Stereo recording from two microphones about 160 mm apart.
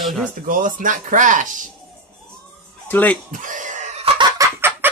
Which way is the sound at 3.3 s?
55° right (ahead or behind).